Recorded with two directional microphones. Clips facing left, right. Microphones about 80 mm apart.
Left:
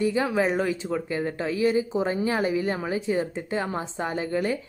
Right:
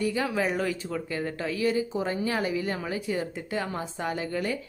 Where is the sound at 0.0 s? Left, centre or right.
Left.